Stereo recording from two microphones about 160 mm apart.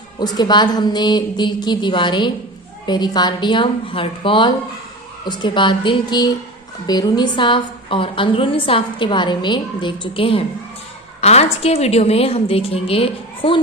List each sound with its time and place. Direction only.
0.3 s a woman's voice: 25° left (ahead or behind)